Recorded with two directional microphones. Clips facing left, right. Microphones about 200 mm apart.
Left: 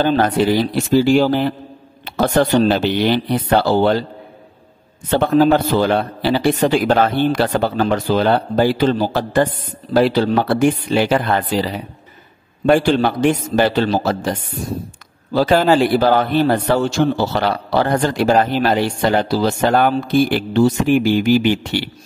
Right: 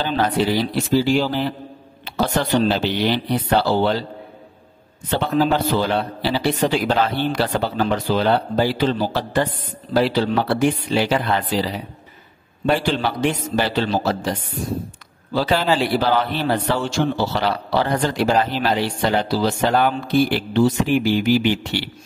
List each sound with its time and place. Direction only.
0.0 s a man's voice: 50° left (ahead or behind)
5.1 s a man's voice: 50° left (ahead or behind)
15.3 s a man's voice: 45° left (ahead or behind)